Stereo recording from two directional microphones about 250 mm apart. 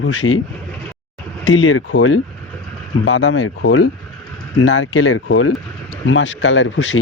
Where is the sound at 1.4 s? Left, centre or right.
Left.